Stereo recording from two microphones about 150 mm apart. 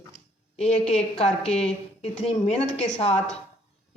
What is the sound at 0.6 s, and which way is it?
A woman's voice, 45° left (ahead or behind).